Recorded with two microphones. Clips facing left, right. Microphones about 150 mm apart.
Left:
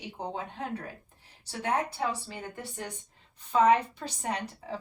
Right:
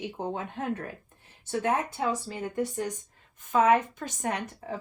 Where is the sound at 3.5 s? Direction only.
50° right (ahead or behind).